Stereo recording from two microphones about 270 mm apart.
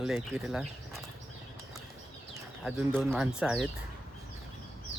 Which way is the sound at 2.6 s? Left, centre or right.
Centre.